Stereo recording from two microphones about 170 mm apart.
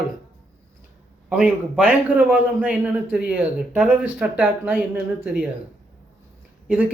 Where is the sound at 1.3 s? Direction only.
5° right (ahead or behind).